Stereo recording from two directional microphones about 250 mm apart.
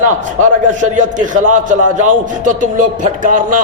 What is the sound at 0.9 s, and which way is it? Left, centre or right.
A man's voice, right.